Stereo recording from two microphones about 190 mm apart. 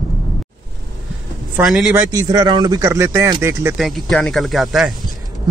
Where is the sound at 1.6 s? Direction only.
Centre (ahead or behind).